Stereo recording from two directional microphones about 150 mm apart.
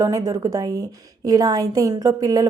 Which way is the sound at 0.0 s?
25° right (ahead or behind).